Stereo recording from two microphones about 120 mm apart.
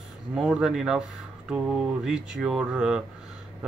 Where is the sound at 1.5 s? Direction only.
10° right (ahead or behind).